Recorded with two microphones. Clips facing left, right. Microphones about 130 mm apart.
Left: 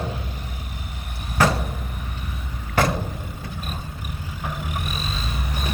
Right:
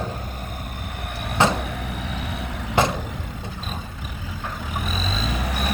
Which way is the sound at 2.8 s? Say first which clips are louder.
Right 1 dB; 20° right (ahead or behind).